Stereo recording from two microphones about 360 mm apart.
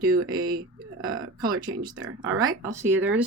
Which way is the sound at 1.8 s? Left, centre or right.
Centre.